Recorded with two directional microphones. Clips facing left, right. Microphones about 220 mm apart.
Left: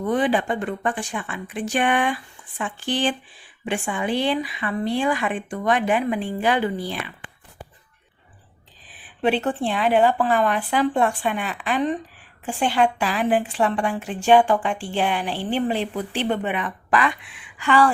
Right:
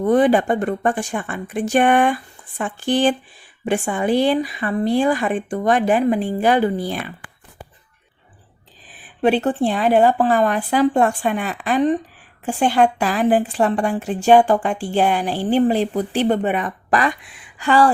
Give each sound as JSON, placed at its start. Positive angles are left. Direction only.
{"t": 0.0, "sound": "a woman's voice", "side_deg": -45}
{"t": 9.2, "sound": "a woman's voice", "side_deg": -40}